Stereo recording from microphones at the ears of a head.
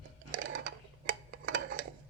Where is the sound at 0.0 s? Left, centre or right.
Right.